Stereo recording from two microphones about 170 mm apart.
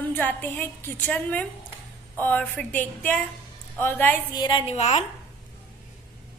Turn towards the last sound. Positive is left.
turn(degrees=35)  # may be behind; listen again after turning